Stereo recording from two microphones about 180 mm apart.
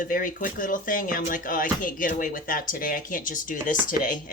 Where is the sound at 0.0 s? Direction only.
50° left (ahead or behind).